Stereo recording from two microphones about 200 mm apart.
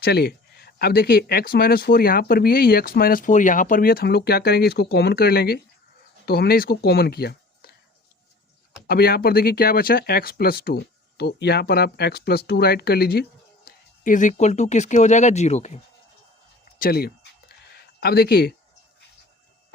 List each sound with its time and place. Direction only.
0.0 s speech: 50° left (ahead or behind)
8.9 s speech: 50° left (ahead or behind)
13.7 s speech: 40° left (ahead or behind)
16.7 s speech: 50° left (ahead or behind)